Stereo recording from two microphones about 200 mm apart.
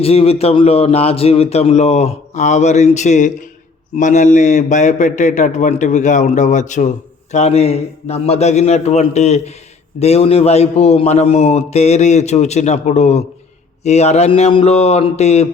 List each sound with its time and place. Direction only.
0.0 s a man's voice: 30° left (ahead or behind)